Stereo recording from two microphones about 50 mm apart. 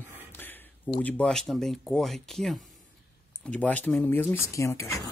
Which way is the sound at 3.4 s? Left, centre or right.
Left.